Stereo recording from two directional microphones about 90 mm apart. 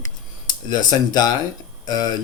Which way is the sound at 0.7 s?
50° left (ahead or behind).